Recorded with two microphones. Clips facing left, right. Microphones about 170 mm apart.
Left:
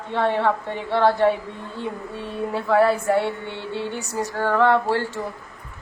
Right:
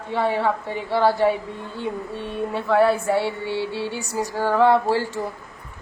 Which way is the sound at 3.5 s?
5° right (ahead or behind).